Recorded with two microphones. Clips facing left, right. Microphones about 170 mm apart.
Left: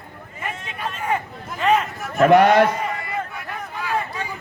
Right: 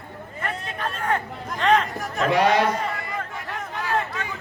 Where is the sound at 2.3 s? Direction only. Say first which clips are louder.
Left 6 dB; 55° left (ahead or behind).